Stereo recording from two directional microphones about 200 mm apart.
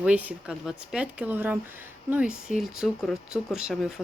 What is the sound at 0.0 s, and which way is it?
Speech, 5° right (ahead or behind).